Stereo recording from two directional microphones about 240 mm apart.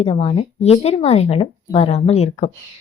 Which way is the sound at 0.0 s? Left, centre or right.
Left.